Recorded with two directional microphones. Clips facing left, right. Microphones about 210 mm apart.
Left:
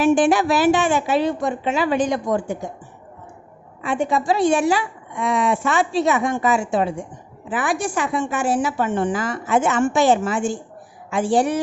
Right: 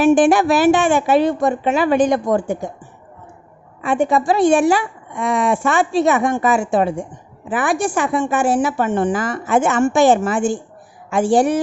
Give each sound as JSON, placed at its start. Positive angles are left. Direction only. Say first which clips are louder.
{"t": 0.0, "sound": "a woman's voice", "louder": "right 4 dB", "side_deg": -50}
{"t": 3.8, "sound": "a woman's voice", "louder": "right 4 dB", "side_deg": -55}